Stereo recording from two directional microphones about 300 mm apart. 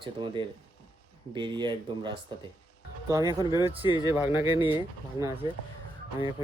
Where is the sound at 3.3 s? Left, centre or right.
Centre.